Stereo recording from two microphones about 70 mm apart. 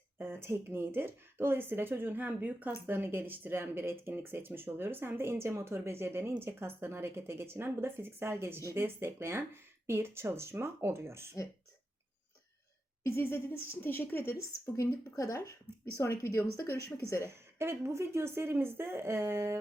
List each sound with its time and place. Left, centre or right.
0.2 s speech: right
13.0 s a woman's voice: left
17.2 s speech: right